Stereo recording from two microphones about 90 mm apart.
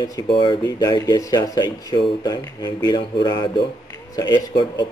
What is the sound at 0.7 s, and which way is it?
A man's voice, 50° left (ahead or behind).